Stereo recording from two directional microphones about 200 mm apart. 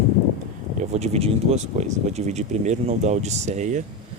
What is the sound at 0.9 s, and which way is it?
Speech, 35° right (ahead or behind).